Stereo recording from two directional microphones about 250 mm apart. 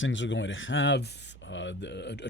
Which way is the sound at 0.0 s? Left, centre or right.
Left.